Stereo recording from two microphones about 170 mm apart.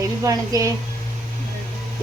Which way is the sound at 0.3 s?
20° right (ahead or behind).